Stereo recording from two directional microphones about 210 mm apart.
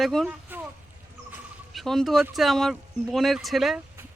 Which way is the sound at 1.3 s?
5° right (ahead or behind).